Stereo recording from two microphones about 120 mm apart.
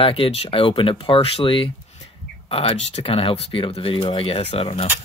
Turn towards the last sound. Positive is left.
turn(degrees=50)  # may be behind; listen again after turning